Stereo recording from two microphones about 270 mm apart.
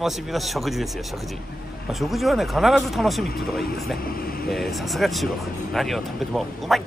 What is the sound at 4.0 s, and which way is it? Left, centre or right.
Speech, left.